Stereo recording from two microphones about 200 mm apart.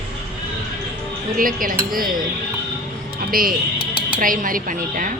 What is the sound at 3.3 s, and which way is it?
A woman's voice, 45° right (ahead or behind).